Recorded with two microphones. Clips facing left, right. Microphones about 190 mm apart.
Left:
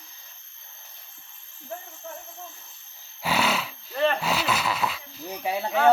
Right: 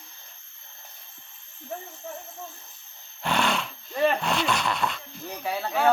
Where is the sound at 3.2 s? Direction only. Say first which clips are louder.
Even; 5° left (ahead or behind).